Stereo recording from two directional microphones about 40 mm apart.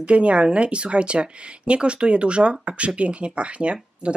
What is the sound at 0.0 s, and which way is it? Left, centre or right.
Speech, right.